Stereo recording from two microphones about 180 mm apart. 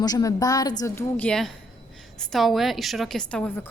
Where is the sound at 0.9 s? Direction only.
10° left (ahead or behind).